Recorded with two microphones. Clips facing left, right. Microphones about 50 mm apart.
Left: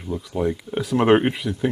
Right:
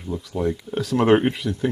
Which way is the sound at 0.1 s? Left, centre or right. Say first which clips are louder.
Left 1 dB; centre.